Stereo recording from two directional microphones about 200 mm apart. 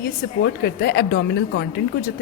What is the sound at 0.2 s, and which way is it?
A woman's voice, 50° left (ahead or behind).